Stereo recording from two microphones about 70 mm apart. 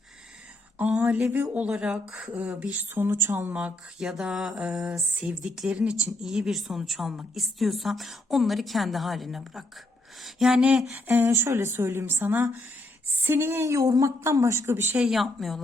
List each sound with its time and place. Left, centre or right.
0.8 s a sound: right
1.2 s speech: right
1.6 s mantra: centre
2.3 s speech: centre; by 3.5 s right
3.5 s mantra: centre
5.2 s speech: centre
5.5 s mantra: centre
6.2 s a woman's voice: centre
10.2 s a sound: centre
10.6 s mantra: centre
11.0 s a woman's voice: right
12.2 s speech: right
14.5 s a woman's voice: right
15.1 s a woman's voice: centre